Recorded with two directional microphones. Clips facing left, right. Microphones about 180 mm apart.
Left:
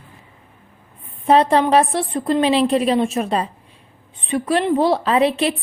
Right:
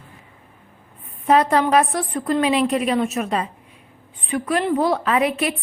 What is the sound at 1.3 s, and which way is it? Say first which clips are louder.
A woman's voice: left 2 dB; 30° left (ahead or behind).